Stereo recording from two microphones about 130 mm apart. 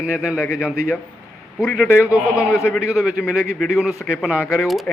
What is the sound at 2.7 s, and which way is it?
A man's voice, 5° right (ahead or behind).